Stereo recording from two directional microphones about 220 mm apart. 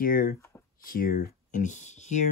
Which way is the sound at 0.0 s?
40° left (ahead or behind).